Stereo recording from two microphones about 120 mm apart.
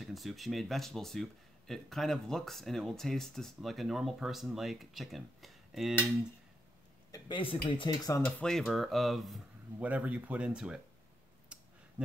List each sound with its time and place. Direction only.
0.0 s speech: centre (ahead or behind)
7.2 s speech: 45° left (ahead or behind)
8.3 s speech: 5° left (ahead or behind)
9.8 s speech: 10° right (ahead or behind)